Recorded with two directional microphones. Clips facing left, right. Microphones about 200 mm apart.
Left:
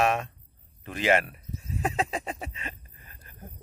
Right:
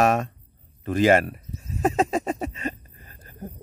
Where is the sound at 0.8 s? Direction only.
40° right (ahead or behind).